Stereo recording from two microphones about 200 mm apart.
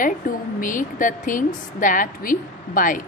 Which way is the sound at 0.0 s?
40° left (ahead or behind).